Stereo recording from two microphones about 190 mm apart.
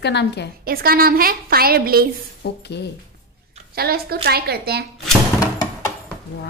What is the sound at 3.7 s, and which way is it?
A woman's voice, 55° right (ahead or behind).